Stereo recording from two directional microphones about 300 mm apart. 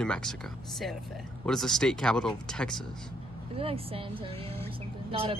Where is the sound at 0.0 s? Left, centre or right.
Centre.